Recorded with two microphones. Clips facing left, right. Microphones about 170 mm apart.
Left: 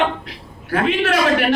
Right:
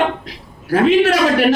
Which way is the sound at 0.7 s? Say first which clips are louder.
Right 6 dB; 40° right (ahead or behind).